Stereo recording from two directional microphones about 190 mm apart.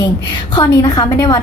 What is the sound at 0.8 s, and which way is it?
Speech, 20° left (ahead or behind).